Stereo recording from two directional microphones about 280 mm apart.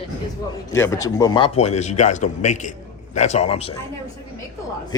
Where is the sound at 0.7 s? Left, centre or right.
Centre.